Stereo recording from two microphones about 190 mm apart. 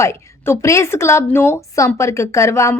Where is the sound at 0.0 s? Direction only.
15° left (ahead or behind).